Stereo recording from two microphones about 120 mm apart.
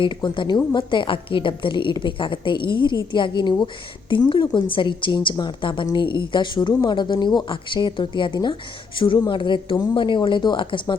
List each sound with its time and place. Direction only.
0.0 s a woman's voice: 40° left (ahead or behind)